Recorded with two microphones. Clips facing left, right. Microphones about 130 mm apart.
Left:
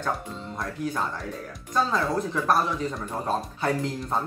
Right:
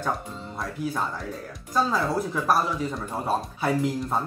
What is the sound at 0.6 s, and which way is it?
Speech, 5° right (ahead or behind).